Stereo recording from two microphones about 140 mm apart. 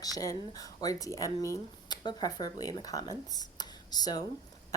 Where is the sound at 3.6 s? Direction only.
30° left (ahead or behind).